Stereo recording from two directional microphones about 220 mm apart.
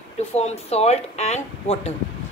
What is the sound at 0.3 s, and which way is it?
A woman's voice, 30° left (ahead or behind).